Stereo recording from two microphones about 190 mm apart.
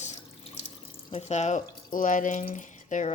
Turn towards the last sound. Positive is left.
turn(degrees=40)  # may be behind; listen again after turning